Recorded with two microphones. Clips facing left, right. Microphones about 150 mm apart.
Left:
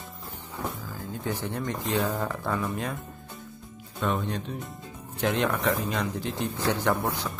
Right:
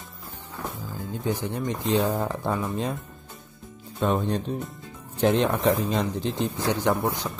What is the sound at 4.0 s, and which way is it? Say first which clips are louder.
Speech: right 4 dB; 35° right (ahead or behind).